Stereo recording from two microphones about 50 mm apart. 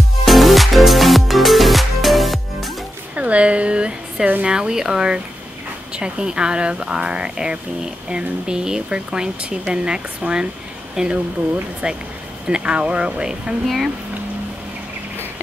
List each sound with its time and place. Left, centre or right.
0.2 s music: centre
3.2 s a sound: right
4.4 s speech: centre